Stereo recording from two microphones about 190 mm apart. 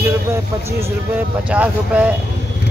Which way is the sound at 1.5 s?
5° right (ahead or behind).